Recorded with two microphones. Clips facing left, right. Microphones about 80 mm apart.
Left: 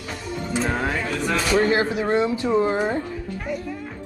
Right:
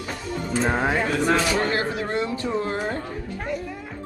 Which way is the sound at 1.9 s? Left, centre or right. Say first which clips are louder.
Left 5 dB; centre.